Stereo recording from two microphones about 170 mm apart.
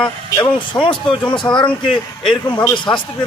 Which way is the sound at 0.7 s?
30° left (ahead or behind).